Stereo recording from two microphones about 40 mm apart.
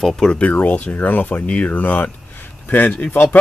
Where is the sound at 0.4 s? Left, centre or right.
Left.